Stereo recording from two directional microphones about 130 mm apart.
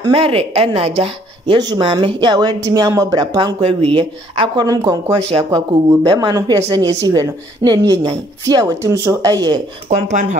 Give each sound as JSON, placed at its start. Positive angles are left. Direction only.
{"t": 0.0, "sound": "a woman's voice", "side_deg": -45}
{"t": 1.6, "sound": "speech", "side_deg": -35}
{"t": 4.6, "sound": "speech", "side_deg": -30}
{"t": 9.8, "sound": "speech", "side_deg": -65}